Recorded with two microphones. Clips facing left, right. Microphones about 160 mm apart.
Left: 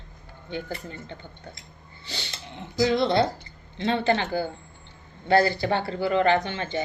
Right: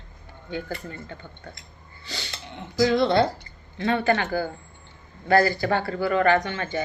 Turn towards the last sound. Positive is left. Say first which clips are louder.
# right 1 dB
turn(degrees=25)  # may be behind; listen again after turning